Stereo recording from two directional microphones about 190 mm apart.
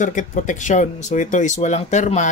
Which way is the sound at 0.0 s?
40° left (ahead or behind).